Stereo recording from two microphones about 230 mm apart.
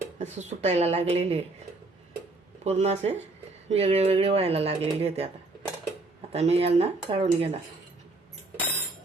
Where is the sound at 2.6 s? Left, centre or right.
Right.